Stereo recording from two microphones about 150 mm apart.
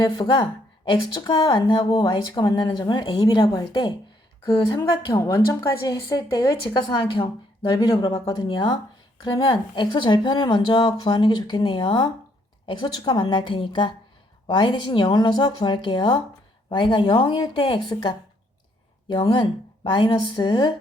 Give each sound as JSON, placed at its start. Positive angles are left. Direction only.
{"t": 0.0, "sound": "a woman's voice", "side_deg": 30}